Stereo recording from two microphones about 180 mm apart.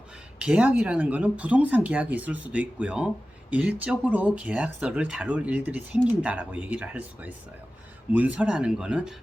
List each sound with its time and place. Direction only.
0.3 s speech: 5° right (ahead or behind)